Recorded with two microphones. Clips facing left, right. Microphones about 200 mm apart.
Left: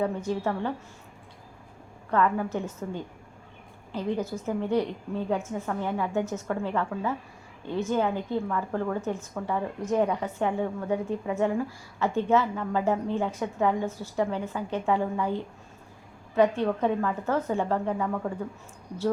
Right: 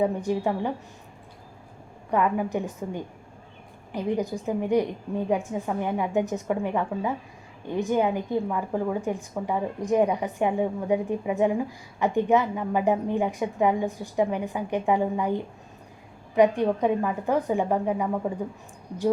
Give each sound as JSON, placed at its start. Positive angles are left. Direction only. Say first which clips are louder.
{"t": 0.0, "sound": "a woman's voice", "louder": "right 3 dB", "side_deg": -15}
{"t": 2.0, "sound": "a woman's voice", "louder": "right 1 dB", "side_deg": -15}